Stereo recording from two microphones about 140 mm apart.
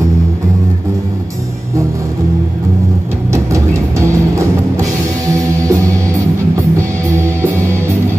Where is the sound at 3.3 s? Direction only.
20° right (ahead or behind).